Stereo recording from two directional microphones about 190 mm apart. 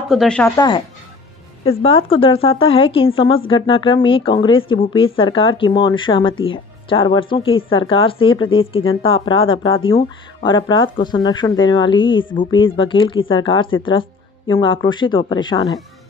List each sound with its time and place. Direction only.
0.1 s speech: 5° left (ahead or behind)
0.6 s speech: 25° left (ahead or behind)